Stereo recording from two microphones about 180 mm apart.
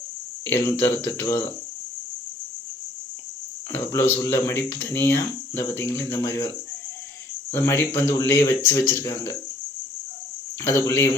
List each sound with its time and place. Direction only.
0.4 s speech: 15° left (ahead or behind)
3.7 s speech: 15° left (ahead or behind)
7.5 s speech: 15° left (ahead or behind)
10.6 s speech: 15° left (ahead or behind)